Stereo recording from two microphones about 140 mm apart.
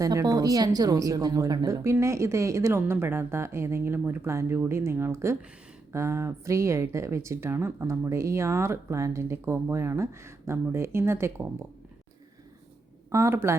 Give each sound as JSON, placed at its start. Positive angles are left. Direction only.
{"t": 0.0, "sound": "speech", "side_deg": -25}
{"t": 13.1, "sound": "speech", "side_deg": -20}